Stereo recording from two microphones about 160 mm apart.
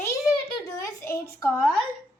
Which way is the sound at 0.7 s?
20° left (ahead or behind).